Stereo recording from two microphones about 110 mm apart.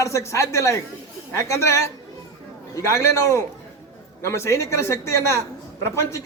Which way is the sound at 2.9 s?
25° left (ahead or behind).